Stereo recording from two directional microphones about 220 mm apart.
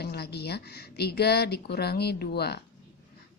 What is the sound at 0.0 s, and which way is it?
A woman's voice, 50° left (ahead or behind).